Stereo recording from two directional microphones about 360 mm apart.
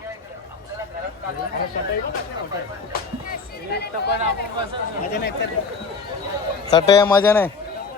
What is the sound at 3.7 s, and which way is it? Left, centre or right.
Speech, left.